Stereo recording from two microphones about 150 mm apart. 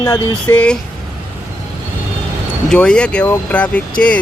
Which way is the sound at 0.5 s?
5° left (ahead or behind).